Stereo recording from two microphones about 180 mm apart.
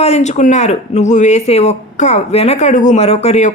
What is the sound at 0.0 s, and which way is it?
Speech, 35° left (ahead or behind).